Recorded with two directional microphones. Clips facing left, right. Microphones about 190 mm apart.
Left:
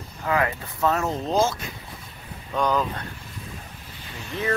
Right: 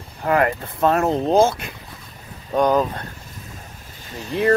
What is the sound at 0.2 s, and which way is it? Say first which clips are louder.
Speech: right 5 dB; 50° right (ahead or behind).